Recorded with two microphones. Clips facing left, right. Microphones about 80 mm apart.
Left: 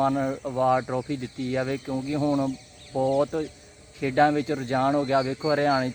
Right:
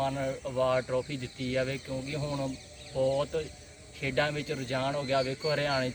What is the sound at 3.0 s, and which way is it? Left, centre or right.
Speech, left.